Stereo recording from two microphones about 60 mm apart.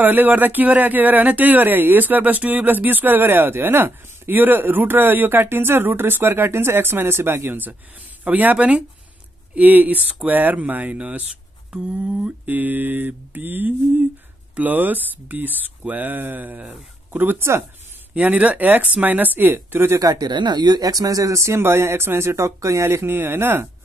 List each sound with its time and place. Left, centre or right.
0.0 s speech: right
8.2 s mantra: right
17.1 s speech: right
18.1 s mantra: right
20.6 s speech: right
23.0 s speech: right